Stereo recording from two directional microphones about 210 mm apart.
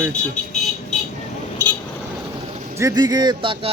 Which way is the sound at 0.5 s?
35° left (ahead or behind).